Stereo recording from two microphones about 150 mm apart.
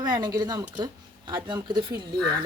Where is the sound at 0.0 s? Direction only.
25° right (ahead or behind).